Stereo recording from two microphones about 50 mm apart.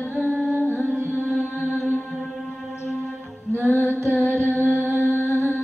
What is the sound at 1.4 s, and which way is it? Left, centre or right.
Mantra, left.